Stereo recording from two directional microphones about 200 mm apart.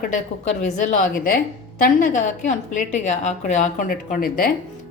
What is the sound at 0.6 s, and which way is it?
A woman's voice, 35° left (ahead or behind).